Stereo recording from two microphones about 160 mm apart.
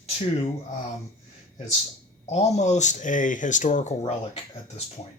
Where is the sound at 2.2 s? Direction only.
45° left (ahead or behind).